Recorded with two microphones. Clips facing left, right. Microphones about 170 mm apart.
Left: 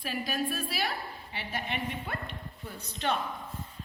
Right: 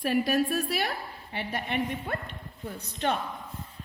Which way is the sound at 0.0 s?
65° right (ahead or behind).